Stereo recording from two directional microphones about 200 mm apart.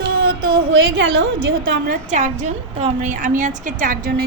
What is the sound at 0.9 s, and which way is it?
Speech, 65° right (ahead or behind).